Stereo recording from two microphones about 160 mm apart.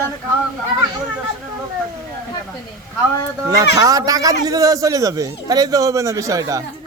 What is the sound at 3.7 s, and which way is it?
A man's voice, 20° right (ahead or behind).